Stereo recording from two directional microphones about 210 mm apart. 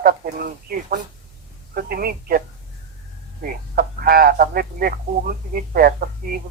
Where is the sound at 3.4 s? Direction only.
45° right (ahead or behind).